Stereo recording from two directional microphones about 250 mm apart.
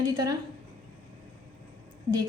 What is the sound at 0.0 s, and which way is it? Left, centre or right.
Speech, centre.